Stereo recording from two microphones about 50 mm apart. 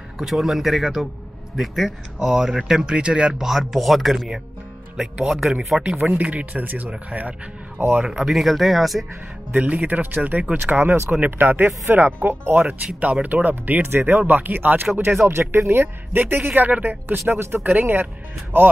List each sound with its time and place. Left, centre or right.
0.2 s speech: centre
2.8 s speech: centre
5.8 s speech: right
8.0 s speech: centre
9.5 s speech: right
13.0 s speech: right
15.2 s speech: right
17.3 s speech: centre
17.6 s speech: right